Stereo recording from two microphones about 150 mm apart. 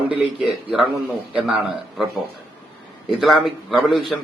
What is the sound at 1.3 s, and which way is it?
Speech, 5° right (ahead or behind).